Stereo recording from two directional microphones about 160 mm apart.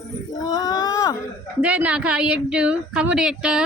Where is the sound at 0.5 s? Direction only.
25° left (ahead or behind).